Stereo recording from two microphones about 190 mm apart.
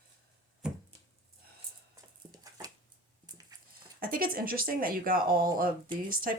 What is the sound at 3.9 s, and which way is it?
Speech, 50° right (ahead or behind).